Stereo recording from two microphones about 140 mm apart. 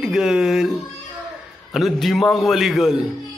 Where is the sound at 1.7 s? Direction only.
Centre (ahead or behind).